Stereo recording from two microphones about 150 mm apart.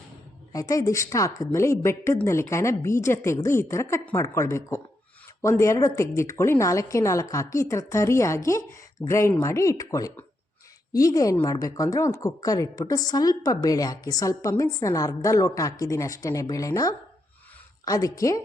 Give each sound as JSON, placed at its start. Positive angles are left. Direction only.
{"t": 0.5, "sound": "a woman's voice", "side_deg": 20}